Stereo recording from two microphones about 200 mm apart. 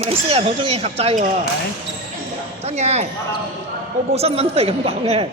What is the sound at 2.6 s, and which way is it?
Speech, 35° right (ahead or behind).